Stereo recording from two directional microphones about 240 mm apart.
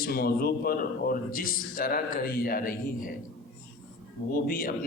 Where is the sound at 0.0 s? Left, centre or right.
Left.